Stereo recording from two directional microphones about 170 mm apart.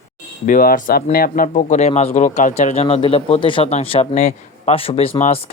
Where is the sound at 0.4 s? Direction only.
55° left (ahead or behind).